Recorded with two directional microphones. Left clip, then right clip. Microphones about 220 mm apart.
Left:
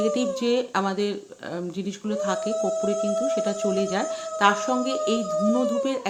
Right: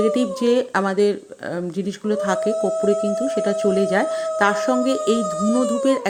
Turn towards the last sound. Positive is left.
turn(degrees=-25)  # may be behind; listen again after turning